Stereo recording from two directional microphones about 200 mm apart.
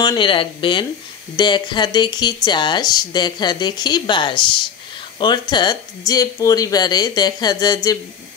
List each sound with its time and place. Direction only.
0.0 s speech: 20° left (ahead or behind)